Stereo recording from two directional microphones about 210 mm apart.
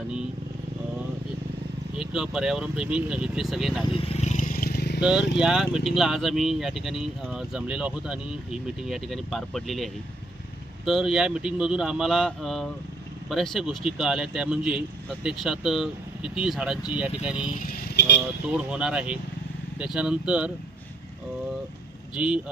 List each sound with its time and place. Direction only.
2.0 s speech: 5° right (ahead or behind)
3.8 s vehicle: 25° left (ahead or behind); by 4.9 s 50° left (ahead or behind)
4.9 s speech: 5° right (ahead or behind)
17.5 s vehicle: 45° left (ahead or behind)
18.5 s speech: 5° right (ahead or behind)
22.1 s speech: 5° right (ahead or behind)